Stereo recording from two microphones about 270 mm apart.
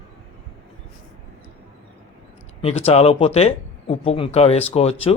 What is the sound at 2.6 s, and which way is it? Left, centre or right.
Speech, left.